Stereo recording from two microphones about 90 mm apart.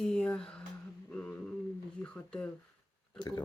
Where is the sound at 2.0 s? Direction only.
20° left (ahead or behind).